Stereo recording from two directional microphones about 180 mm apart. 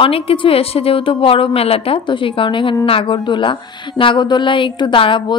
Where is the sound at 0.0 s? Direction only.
30° left (ahead or behind).